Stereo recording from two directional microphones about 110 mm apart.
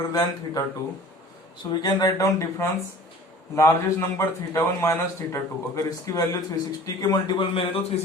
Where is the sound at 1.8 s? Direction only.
35° left (ahead or behind).